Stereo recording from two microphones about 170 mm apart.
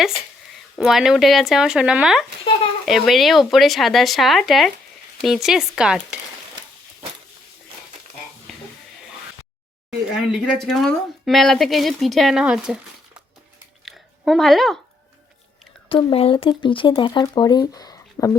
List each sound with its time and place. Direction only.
0.8 s speech: centre (ahead or behind)
9.9 s speech: centre (ahead or behind)
13.8 s a sound: centre (ahead or behind)
15.9 s speech: 30° left (ahead or behind)